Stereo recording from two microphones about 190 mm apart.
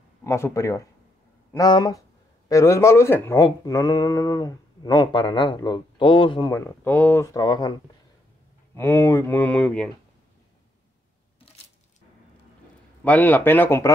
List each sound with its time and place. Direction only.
0.2 s speech: 15° left (ahead or behind)
7.3 s speech: 20° left (ahead or behind)
8.7 s speech: 15° left (ahead or behind)
13.0 s speech: 10° left (ahead or behind)